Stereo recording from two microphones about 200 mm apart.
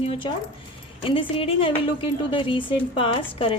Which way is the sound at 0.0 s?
30° left (ahead or behind).